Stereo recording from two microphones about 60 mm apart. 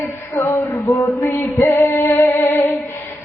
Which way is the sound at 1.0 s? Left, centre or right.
Left.